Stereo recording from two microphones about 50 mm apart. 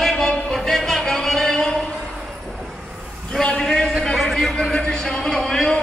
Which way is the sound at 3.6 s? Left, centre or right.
Centre.